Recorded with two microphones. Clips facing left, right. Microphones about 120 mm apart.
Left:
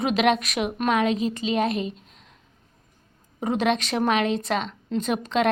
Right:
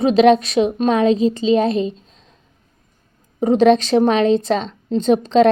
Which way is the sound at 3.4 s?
30° right (ahead or behind).